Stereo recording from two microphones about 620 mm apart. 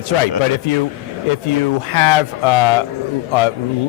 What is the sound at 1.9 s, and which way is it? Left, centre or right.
Speech, left.